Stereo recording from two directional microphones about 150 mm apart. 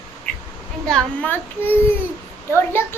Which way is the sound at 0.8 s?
5° left (ahead or behind).